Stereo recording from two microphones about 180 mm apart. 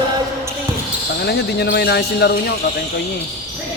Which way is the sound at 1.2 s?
65° left (ahead or behind).